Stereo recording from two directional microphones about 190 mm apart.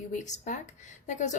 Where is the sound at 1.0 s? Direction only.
40° left (ahead or behind).